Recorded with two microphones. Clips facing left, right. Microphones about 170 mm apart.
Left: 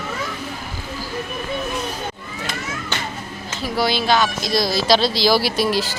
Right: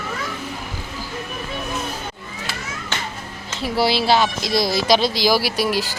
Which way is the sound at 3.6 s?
30° right (ahead or behind).